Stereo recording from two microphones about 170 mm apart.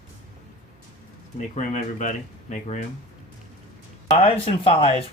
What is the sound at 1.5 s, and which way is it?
Speech, 45° left (ahead or behind).